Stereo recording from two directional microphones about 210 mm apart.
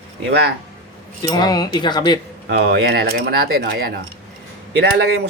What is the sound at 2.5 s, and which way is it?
Speech, 50° right (ahead or behind).